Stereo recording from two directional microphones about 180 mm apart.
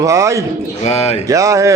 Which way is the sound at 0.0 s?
15° right (ahead or behind).